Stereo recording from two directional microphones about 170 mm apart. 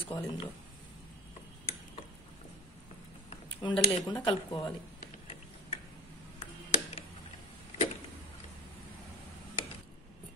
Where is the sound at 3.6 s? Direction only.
20° left (ahead or behind).